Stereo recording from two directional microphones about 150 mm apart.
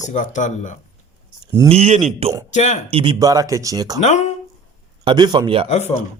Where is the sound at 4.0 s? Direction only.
50° left (ahead or behind).